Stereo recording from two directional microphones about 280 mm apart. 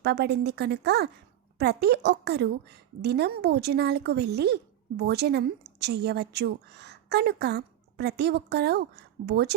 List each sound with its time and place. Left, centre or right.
0.0 s speech: right